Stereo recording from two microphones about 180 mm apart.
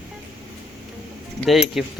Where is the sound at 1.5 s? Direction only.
Centre (ahead or behind).